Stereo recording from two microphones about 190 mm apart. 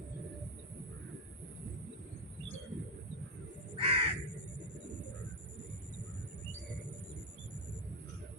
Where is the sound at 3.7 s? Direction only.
30° right (ahead or behind).